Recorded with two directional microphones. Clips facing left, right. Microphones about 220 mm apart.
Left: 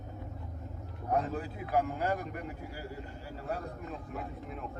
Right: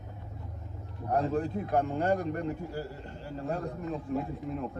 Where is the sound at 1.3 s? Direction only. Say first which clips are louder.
Right 4 dB; 5° left (ahead or behind).